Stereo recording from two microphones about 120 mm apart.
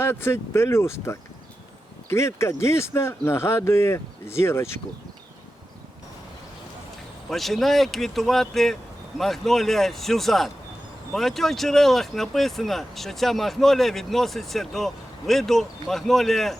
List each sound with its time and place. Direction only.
0.0 s speech: 20° left (ahead or behind)
7.3 s speech: centre (ahead or behind)